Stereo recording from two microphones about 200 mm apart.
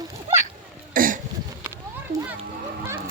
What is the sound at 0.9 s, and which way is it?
Cough, 45° right (ahead or behind).